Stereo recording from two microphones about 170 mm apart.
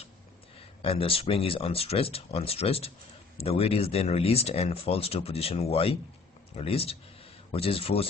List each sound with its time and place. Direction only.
0.8 s speech: 35° left (ahead or behind)